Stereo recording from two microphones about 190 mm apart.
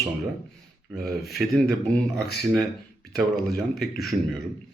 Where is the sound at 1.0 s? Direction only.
Centre (ahead or behind).